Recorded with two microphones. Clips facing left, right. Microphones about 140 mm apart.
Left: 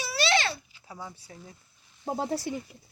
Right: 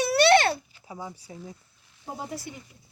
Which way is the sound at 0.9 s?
20° right (ahead or behind).